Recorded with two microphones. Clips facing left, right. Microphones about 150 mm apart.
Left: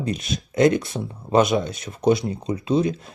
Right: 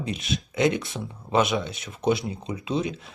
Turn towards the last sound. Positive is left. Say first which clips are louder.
# left 6 dB
turn(degrees=40)  # may be behind; listen again after turning